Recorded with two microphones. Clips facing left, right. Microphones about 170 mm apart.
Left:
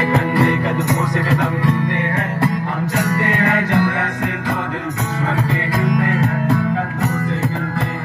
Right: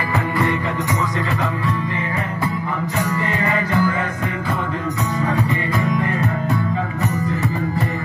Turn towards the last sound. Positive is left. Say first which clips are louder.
# left 3 dB
turn(degrees=85)